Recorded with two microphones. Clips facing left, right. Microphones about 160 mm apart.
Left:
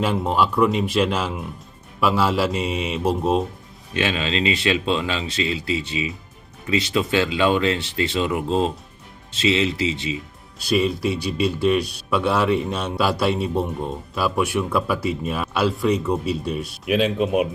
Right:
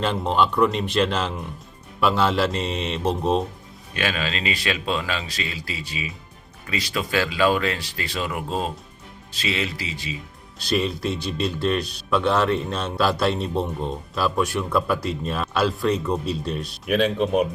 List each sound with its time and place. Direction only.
0.0 s speech: 5° left (ahead or behind)
3.9 s speech: 25° left (ahead or behind)
10.6 s speech: 5° left (ahead or behind)